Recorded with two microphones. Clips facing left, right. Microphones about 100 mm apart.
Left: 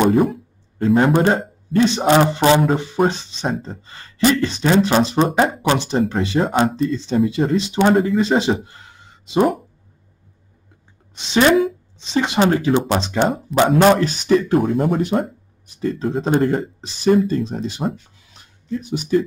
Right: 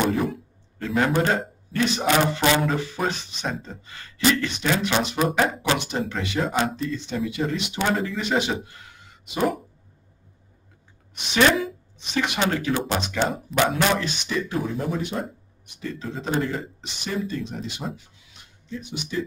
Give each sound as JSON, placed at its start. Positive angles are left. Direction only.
{"t": 0.0, "sound": "a man's voice", "side_deg": 35}
{"t": 7.9, "sound": "speech", "side_deg": 50}
{"t": 8.2, "sound": "speech", "side_deg": 30}
{"t": 11.1, "sound": "a man's voice", "side_deg": 25}